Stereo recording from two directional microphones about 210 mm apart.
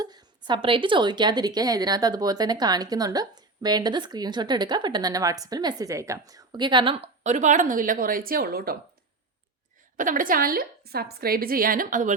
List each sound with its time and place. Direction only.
0.0 s a woman's voice: 20° right (ahead or behind); by 8.8 s 45° right (ahead or behind)
10.0 s a woman's voice: 40° right (ahead or behind)